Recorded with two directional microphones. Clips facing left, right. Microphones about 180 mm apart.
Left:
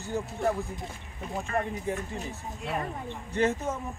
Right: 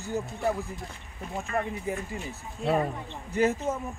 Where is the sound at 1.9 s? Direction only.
5° right (ahead or behind).